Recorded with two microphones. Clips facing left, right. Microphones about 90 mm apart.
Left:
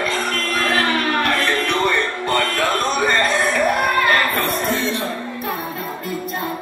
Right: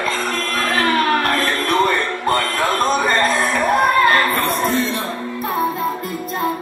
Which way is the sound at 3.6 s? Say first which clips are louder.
Right 7 dB; 35° right (ahead or behind).